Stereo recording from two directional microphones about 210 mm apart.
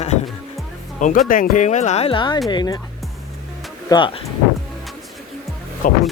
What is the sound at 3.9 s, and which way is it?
Speech, 25° left (ahead or behind).